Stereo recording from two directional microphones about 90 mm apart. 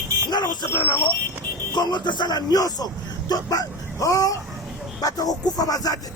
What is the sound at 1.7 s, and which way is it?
Speech, 55° left (ahead or behind).